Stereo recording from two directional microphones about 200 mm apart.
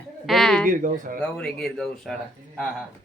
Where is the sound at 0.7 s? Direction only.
45° right (ahead or behind).